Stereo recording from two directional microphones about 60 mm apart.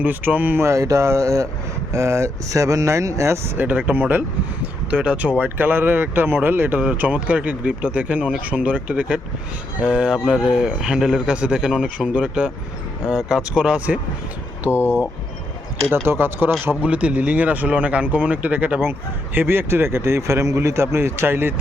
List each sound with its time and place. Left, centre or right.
0.0 s speech: right
0.6 s speech: right
1.9 s speech: right
3.6 s speech: right
4.6 s a sound: centre
5.4 s speech: right
16.0 s speech: right
16.8 s speech: right
18.8 s speech: right